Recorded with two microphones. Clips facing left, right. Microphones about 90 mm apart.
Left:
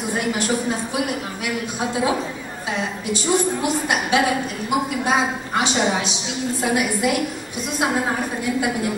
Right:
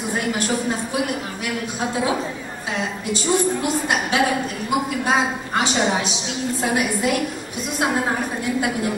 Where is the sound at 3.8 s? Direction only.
20° left (ahead or behind).